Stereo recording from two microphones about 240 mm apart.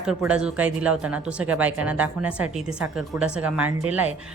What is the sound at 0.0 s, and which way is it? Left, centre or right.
Speech, centre.